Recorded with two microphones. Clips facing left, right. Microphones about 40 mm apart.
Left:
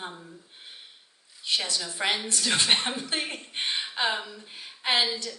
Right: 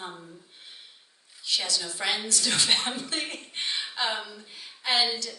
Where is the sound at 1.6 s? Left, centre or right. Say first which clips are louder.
Left 1 dB; left.